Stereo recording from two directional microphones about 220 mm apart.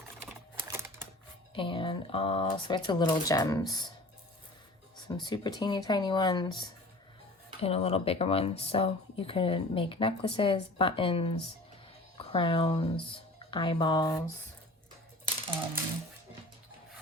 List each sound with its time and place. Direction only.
1.5 s speech: 20° left (ahead or behind)
5.0 s speech: 20° left (ahead or behind)